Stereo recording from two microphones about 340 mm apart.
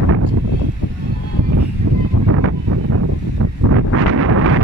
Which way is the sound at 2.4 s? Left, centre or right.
Right.